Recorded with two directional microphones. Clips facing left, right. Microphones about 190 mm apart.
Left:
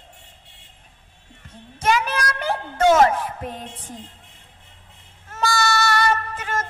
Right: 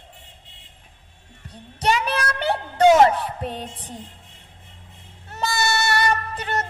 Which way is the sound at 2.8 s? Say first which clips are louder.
Right 2 dB; 20° right (ahead or behind).